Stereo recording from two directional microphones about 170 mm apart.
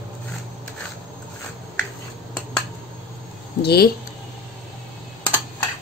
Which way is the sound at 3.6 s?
70° left (ahead or behind).